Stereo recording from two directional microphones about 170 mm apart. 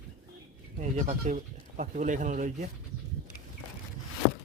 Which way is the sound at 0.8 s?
45° right (ahead or behind).